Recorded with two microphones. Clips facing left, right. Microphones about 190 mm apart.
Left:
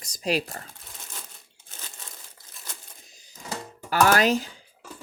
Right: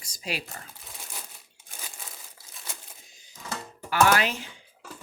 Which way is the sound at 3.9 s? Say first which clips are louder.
Left 3 dB; 40° left (ahead or behind).